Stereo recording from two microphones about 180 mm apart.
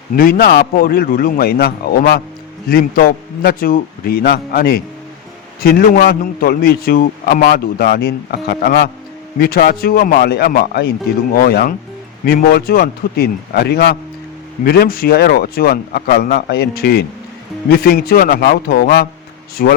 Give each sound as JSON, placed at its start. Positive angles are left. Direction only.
{"t": 0.2, "sound": "a man's voice", "side_deg": 55}